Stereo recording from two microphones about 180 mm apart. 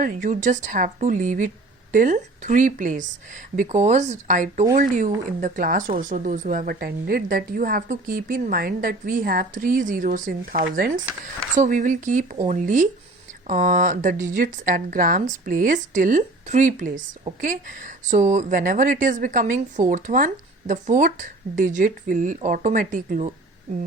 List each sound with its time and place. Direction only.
0.0 s speech: 45° right (ahead or behind)